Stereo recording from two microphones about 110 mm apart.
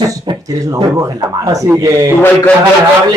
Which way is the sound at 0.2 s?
45° right (ahead or behind).